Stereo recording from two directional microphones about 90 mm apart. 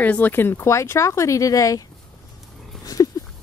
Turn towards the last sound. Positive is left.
turn(degrees=40)  # may be behind; listen again after turning